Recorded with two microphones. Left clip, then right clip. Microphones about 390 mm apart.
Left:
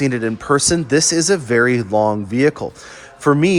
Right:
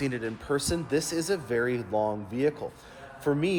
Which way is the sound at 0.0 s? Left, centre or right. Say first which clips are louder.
Left 12 dB; centre.